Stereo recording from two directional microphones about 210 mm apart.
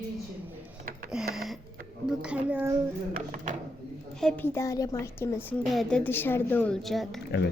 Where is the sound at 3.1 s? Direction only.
35° right (ahead or behind).